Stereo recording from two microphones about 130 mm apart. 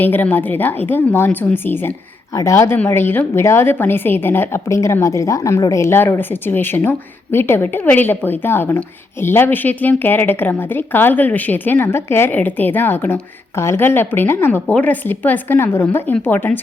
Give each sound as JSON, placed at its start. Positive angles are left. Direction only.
{"t": 0.0, "sound": "a woman's voice", "side_deg": 15}